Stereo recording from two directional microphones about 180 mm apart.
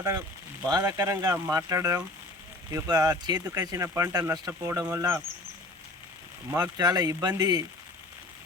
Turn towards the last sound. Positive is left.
turn(degrees=-20)  # may be behind; listen again after turning